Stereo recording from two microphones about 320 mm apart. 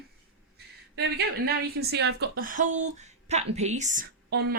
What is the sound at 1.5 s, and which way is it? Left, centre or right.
Speech, right.